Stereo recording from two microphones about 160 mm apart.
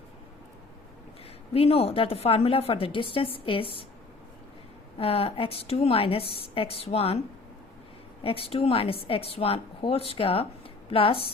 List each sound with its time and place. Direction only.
1.5 s a woman's voice: 40° left (ahead or behind)
4.9 s a woman's voice: 35° left (ahead or behind)
8.2 s a woman's voice: 35° left (ahead or behind)